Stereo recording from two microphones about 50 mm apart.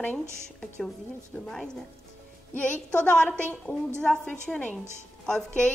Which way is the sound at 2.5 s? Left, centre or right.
Left.